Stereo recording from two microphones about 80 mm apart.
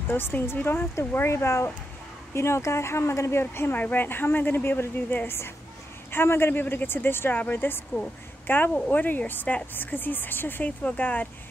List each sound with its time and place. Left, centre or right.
0.1 s speech: left